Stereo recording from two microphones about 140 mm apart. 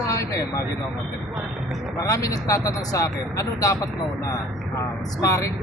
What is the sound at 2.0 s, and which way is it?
Speech, 25° left (ahead or behind).